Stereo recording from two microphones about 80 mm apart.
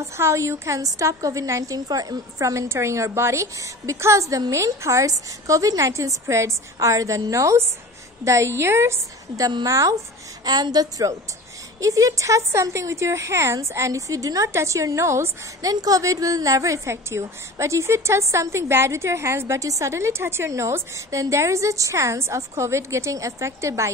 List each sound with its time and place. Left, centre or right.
0.0 s a woman's voice: right
10.4 s a woman's voice: right
15.6 s a woman's voice: right